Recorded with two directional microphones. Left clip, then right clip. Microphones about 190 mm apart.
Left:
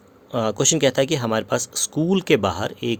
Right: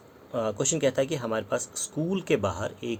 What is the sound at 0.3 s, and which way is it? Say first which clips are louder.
Speech: left 7 dB; 50° left (ahead or behind).